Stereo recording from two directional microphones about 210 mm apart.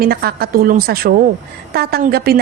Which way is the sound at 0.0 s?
45° right (ahead or behind).